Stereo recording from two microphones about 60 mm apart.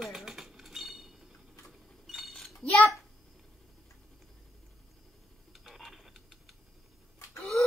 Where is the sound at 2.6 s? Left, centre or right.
Centre.